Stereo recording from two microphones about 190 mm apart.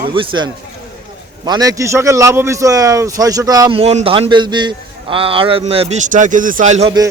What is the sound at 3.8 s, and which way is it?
A man's voice, 30° right (ahead or behind).